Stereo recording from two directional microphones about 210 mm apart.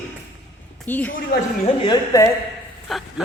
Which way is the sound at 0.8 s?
10° left (ahead or behind).